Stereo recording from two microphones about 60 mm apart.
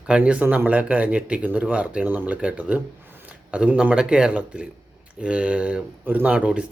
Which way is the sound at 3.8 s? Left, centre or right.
Centre.